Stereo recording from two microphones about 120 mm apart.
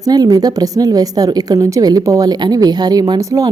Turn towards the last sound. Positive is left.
turn(degrees=-25)  # may be behind; listen again after turning